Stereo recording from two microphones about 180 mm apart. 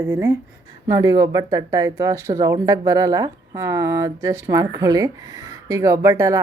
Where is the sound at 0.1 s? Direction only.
15° right (ahead or behind).